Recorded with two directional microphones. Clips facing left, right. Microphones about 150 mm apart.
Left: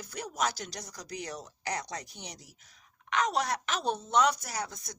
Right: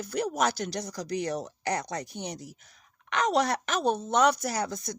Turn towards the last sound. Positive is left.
turn(degrees=-75)  # may be behind; listen again after turning